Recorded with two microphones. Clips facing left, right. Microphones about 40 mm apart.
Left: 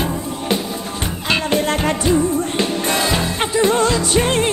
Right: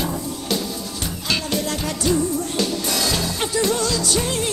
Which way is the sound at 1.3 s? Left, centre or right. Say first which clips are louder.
Left 6 dB; left.